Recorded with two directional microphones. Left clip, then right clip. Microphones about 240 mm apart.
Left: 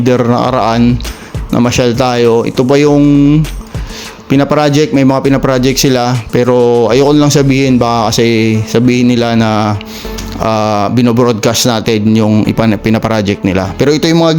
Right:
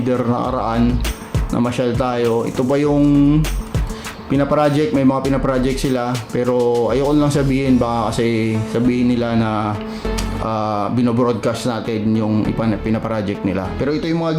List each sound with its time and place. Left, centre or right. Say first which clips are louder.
0.0 s speech: left 9 dB; left